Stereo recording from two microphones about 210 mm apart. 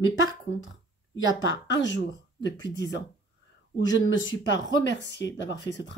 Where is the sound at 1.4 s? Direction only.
60° left (ahead or behind).